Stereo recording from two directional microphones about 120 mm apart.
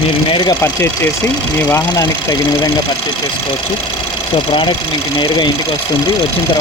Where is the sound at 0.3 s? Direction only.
45° left (ahead or behind).